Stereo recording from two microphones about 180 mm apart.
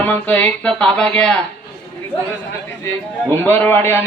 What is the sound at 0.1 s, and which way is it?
Speech, 10° left (ahead or behind).